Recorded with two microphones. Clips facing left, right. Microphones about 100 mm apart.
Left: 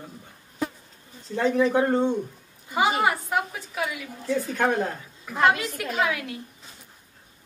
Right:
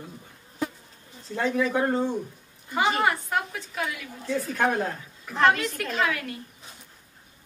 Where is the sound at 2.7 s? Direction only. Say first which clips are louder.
Left 1 dB; 5° left (ahead or behind).